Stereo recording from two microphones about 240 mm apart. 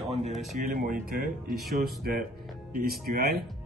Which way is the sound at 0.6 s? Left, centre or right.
Right.